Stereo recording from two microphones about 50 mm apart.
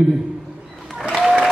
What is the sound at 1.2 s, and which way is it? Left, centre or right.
Applause, centre.